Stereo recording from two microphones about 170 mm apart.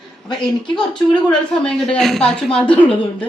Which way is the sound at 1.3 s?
5° left (ahead or behind).